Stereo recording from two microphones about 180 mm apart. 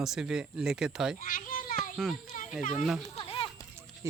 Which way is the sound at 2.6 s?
45° left (ahead or behind).